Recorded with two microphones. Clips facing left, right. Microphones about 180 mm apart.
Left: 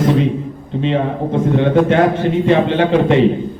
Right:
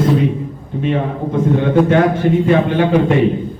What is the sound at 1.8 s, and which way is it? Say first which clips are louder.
A man's voice: right 1 dB; 25° left (ahead or behind).